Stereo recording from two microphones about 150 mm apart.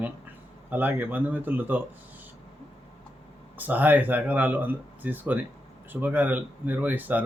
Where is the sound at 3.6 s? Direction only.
10° right (ahead or behind).